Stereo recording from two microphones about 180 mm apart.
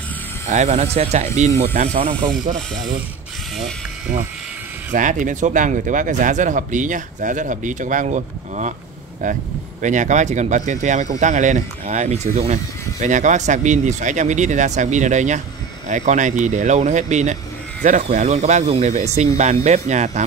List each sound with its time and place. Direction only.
0.5 s speech: 40° right (ahead or behind)
4.9 s speech: 45° right (ahead or behind)